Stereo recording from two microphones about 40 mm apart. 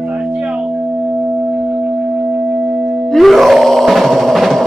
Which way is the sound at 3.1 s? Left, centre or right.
Centre.